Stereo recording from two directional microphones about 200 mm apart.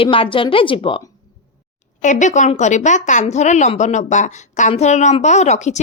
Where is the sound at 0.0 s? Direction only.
25° left (ahead or behind).